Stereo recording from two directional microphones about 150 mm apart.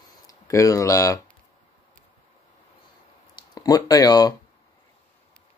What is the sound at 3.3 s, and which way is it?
Speech, 25° left (ahead or behind).